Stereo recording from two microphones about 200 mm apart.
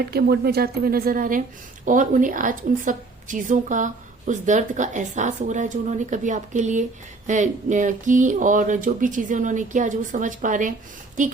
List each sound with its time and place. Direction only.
0.0 s a woman's voice: 50° right (ahead or behind)